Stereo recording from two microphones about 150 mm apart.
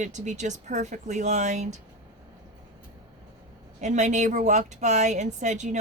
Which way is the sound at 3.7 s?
50° right (ahead or behind).